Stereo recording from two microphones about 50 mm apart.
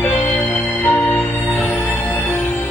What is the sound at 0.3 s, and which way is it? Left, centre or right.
Music, left.